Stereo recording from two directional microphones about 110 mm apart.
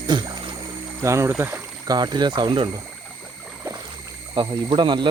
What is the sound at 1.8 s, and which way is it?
Speech, 40° right (ahead or behind).